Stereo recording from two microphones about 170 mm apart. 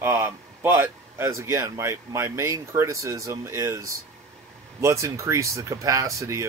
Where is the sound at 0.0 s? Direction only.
15° right (ahead or behind).